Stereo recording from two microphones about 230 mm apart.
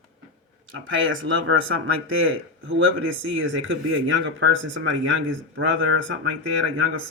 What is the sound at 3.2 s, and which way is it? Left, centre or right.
Speech, right.